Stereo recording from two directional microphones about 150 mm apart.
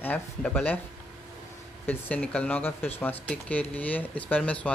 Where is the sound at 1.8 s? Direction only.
10° left (ahead or behind).